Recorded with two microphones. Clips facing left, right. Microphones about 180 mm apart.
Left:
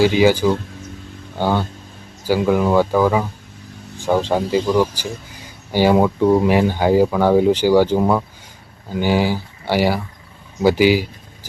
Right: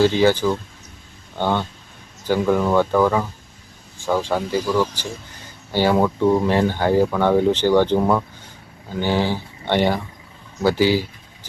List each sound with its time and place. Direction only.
0.0 s speech: 10° left (ahead or behind)